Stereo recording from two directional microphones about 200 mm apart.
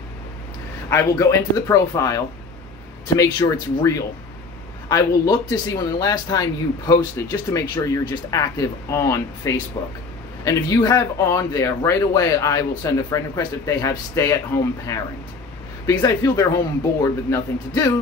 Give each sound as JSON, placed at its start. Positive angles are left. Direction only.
{"t": 0.8, "sound": "speech", "side_deg": 15}
{"t": 4.8, "sound": "speech", "side_deg": 20}